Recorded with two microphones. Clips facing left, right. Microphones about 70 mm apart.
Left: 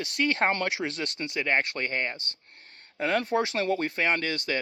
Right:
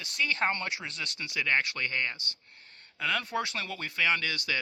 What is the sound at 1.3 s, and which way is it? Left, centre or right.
Speech, left.